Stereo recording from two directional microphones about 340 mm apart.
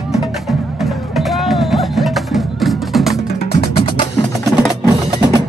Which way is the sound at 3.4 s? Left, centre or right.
Left.